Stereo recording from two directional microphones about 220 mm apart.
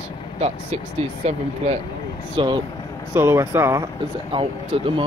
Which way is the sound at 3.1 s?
10° right (ahead or behind).